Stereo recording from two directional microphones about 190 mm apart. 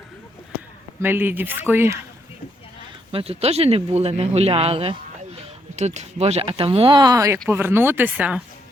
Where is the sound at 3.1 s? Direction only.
30° right (ahead or behind); by 8.4 s 10° right (ahead or behind).